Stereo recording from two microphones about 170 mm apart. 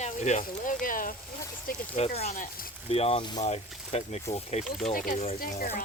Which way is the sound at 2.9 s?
35° left (ahead or behind).